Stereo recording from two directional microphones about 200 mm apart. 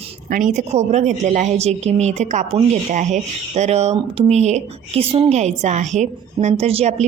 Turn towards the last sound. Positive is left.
turn(degrees=-30)  # may be behind; listen again after turning